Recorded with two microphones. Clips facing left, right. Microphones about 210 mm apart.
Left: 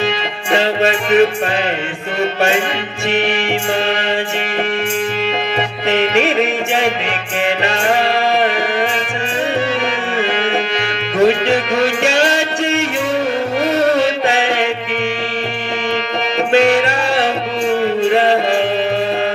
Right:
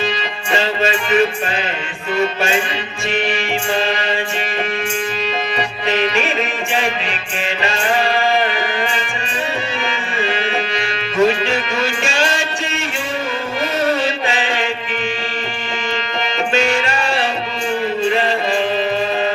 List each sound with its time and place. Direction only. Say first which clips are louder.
0.5 s music: left 4 dB; 65° left (ahead or behind)
3.1 s music: left 3 dB; 70° left (ahead or behind)
5.9 s music: left 5 dB; 70° left (ahead or behind)
10.8 s music: even; 70° left (ahead or behind)
16.5 s music: left 7 dB; 65° left (ahead or behind)